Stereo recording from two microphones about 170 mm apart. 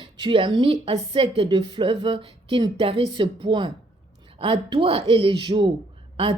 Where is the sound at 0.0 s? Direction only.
30° right (ahead or behind).